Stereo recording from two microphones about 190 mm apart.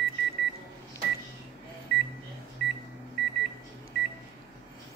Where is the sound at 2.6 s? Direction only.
65° left (ahead or behind).